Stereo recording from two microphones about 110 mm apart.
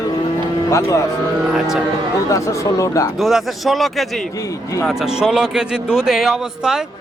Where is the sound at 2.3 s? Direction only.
30° left (ahead or behind).